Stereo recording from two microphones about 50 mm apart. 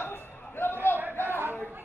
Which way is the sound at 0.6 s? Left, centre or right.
Left.